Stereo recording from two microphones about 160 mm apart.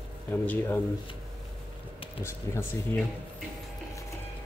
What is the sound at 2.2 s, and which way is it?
Speech, 15° left (ahead or behind).